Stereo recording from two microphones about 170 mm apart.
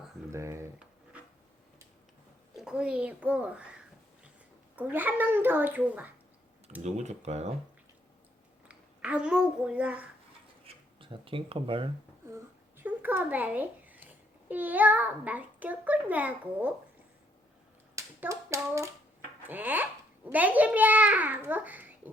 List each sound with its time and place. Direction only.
0.3 s speech: 15° right (ahead or behind)
2.6 s a child's voice: 5° right (ahead or behind)
4.8 s a child's voice: 10° right (ahead or behind)
6.8 s speech: 40° right (ahead or behind)
8.6 s a child's voice: 10° right (ahead or behind)
11.0 s speech: 30° right (ahead or behind)
12.2 s a child's voice: 15° right (ahead or behind)
17.9 s hands: 20° right (ahead or behind)
19.4 s a child's voice: 10° right (ahead or behind)